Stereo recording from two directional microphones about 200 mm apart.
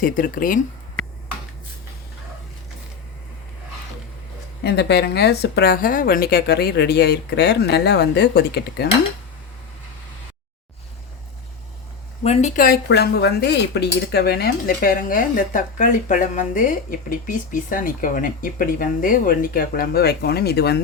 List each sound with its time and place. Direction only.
0.0 s speech: 45° left (ahead or behind)
4.6 s a woman's voice: 55° left (ahead or behind)
12.2 s speech: 35° left (ahead or behind); by 20.7 s 55° left (ahead or behind)